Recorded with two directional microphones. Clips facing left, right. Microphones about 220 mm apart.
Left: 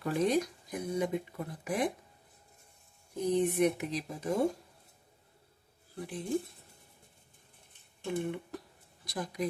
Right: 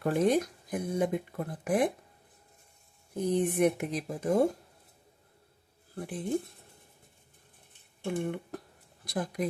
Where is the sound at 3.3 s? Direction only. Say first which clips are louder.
Right 1 dB; 50° right (ahead or behind).